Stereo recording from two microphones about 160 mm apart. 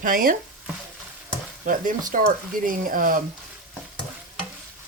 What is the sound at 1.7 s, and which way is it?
Speech, 55° right (ahead or behind).